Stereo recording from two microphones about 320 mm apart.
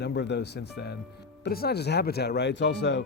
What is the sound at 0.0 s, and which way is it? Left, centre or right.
Speech, left.